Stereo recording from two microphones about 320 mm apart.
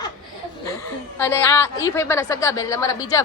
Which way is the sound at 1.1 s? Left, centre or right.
Centre.